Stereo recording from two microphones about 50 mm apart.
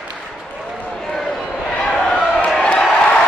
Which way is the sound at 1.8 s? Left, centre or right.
Centre.